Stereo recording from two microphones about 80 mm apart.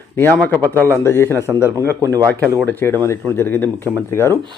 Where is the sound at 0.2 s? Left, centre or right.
Left.